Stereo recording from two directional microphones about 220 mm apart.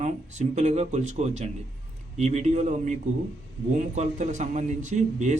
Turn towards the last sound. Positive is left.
turn(degrees=-35)  # may be behind; listen again after turning